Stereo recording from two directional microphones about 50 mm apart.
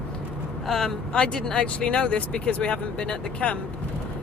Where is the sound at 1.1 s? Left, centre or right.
Centre.